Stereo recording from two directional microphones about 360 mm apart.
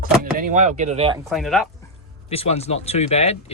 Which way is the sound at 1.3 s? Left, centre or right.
Centre.